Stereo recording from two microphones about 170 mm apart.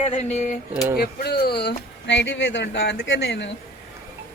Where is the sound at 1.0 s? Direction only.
65° left (ahead or behind).